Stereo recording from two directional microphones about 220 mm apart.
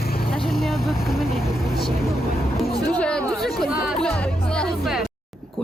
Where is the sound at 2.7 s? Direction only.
45° left (ahead or behind).